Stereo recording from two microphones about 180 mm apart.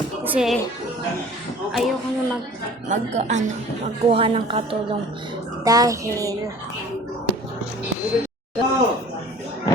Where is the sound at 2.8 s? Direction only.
40° right (ahead or behind).